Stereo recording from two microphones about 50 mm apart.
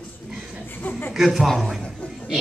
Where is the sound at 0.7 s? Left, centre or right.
Left.